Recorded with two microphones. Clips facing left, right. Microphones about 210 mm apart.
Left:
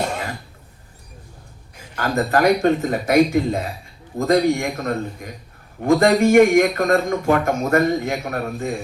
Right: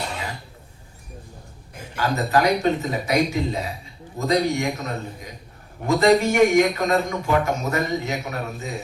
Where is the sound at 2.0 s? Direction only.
50° left (ahead or behind).